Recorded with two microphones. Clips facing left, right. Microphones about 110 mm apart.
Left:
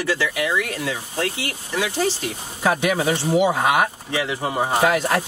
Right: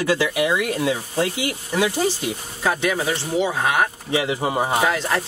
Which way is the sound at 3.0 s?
20° left (ahead or behind).